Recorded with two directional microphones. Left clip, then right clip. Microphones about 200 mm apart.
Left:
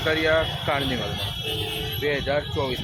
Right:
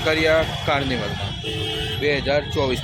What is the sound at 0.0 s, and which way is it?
Speech, 10° right (ahead or behind).